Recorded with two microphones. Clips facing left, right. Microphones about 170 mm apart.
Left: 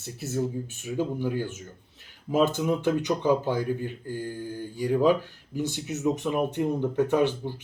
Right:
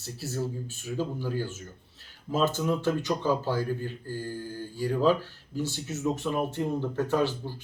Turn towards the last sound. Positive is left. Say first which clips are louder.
# left 3 dB
turn(degrees=20)  # may be behind; listen again after turning